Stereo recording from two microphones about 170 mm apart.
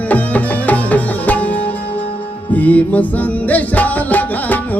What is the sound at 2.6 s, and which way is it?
Music, 10° left (ahead or behind).